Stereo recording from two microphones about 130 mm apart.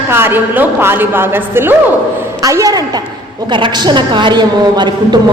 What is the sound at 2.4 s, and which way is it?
A woman's voice, 25° right (ahead or behind).